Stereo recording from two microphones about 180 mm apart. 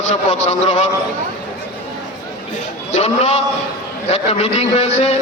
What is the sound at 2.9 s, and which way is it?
A man's voice, 35° left (ahead or behind).